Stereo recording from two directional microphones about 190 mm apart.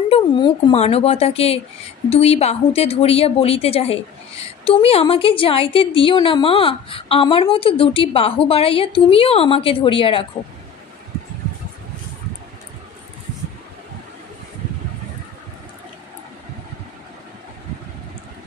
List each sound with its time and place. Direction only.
0.1 s a woman's voice: 25° left (ahead or behind)